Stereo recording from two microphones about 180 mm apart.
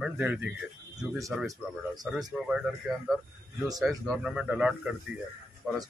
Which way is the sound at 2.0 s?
5° right (ahead or behind).